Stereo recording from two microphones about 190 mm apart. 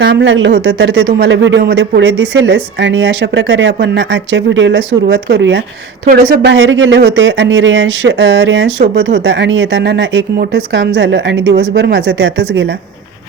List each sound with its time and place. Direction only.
0.0 s speech: 70° right (ahead or behind)